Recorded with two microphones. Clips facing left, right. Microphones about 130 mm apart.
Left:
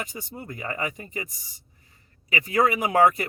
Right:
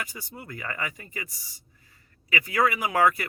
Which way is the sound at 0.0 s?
25° left (ahead or behind).